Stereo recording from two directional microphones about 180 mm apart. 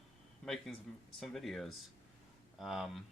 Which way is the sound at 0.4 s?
Centre (ahead or behind).